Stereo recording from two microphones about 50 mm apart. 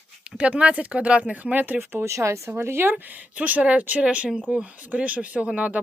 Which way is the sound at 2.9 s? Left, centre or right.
Right.